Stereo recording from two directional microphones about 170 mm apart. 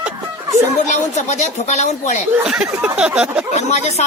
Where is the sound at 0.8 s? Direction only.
40° left (ahead or behind).